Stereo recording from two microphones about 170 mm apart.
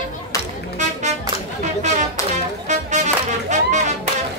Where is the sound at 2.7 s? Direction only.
45° right (ahead or behind).